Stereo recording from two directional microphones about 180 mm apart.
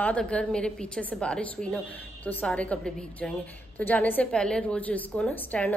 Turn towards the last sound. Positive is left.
turn(degrees=5)  # may be behind; listen again after turning